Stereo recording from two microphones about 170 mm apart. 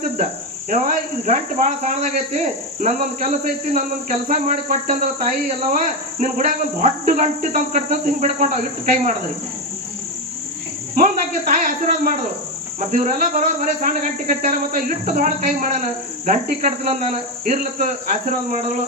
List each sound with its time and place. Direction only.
0.7 s speech: 50° right (ahead or behind)
10.9 s a man's voice: 50° right (ahead or behind)